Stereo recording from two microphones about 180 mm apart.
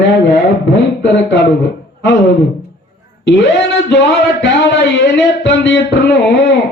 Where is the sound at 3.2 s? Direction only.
75° left (ahead or behind).